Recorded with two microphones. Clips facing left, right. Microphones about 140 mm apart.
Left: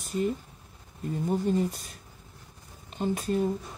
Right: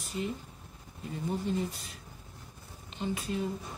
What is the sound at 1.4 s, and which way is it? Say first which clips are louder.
Speech: left 6 dB; 45° left (ahead or behind).